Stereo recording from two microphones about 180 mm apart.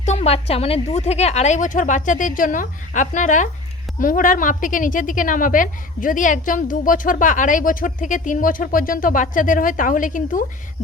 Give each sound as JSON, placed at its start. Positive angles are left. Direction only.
{"t": 0.0, "sound": "a woman's voice", "side_deg": 35}